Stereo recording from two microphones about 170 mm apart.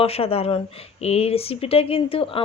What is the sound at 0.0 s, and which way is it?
Speech, 35° left (ahead or behind).